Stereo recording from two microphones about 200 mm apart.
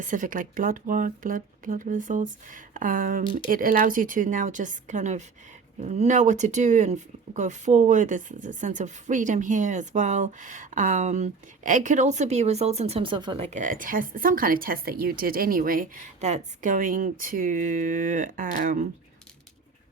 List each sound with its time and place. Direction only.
0.0 s speech: 40° right (ahead or behind)